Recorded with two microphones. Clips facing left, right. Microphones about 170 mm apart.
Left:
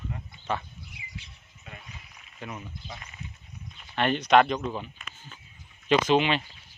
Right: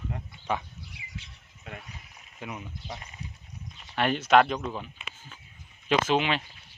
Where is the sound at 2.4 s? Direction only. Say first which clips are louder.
Even; 10° right (ahead or behind).